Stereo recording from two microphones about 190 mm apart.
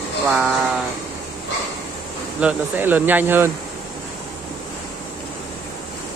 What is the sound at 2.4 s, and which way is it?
Speech, 10° right (ahead or behind).